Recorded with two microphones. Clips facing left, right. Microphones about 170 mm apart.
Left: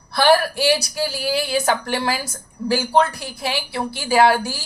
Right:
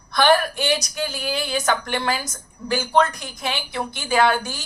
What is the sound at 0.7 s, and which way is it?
A woman's voice, 35° left (ahead or behind).